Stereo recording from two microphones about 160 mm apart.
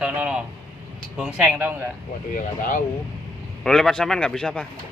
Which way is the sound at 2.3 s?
55° left (ahead or behind).